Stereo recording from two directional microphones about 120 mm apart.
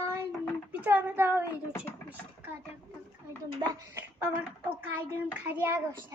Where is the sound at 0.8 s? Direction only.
15° right (ahead or behind).